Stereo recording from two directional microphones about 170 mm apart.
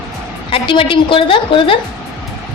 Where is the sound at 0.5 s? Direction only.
30° left (ahead or behind).